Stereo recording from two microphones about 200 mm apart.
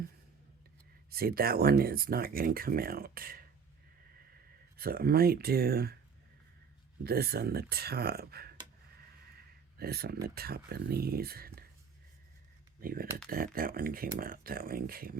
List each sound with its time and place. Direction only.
1.1 s speech: 50° right (ahead or behind)
4.8 s speech: 50° right (ahead or behind)
7.0 s speech: 50° right (ahead or behind)
9.7 s speech: 50° right (ahead or behind)
12.8 s speech: 45° right (ahead or behind)